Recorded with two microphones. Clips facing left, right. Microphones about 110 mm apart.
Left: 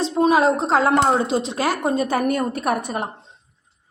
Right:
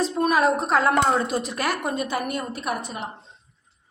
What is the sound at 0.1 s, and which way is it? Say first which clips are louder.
A woman's voice: left 4 dB; 25° left (ahead or behind).